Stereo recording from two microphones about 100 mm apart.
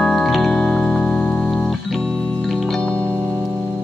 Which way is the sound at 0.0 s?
5° left (ahead or behind).